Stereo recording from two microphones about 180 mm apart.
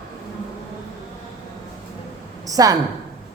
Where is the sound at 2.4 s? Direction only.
20° right (ahead or behind).